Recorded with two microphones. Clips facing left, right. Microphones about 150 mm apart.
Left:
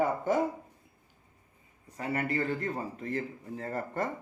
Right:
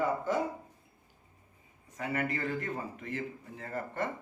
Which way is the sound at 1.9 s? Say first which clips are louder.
Left 2 dB; 30° left (ahead or behind).